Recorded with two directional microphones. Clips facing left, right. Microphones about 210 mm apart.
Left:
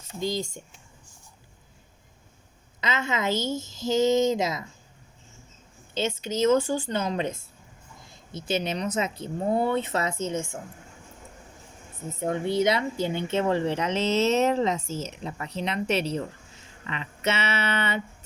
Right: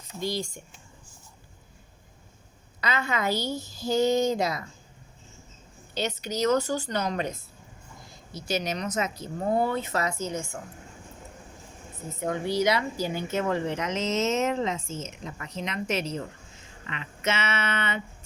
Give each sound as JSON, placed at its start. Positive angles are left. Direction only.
{"t": 0.2, "sound": "a woman's voice", "side_deg": 20}
{"t": 2.8, "sound": "a woman's voice", "side_deg": 20}
{"t": 5.9, "sound": "a woman's voice", "side_deg": 25}
{"t": 12.2, "sound": "speech", "side_deg": 25}